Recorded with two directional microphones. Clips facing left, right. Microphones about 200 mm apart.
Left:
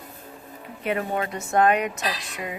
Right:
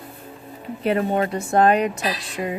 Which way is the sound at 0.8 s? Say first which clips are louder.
Right 6 dB; 30° right (ahead or behind).